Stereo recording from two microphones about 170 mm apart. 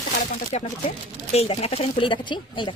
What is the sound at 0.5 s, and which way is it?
Speech, 40° left (ahead or behind).